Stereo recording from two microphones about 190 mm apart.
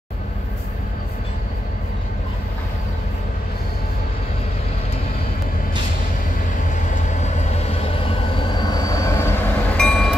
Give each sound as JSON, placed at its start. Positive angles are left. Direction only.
{"t": 6.7, "sound": "vehicle", "side_deg": 40}